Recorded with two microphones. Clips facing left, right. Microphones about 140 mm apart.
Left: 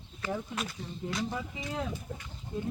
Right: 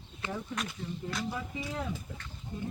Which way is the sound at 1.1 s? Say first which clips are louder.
Left 3 dB; centre (ahead or behind).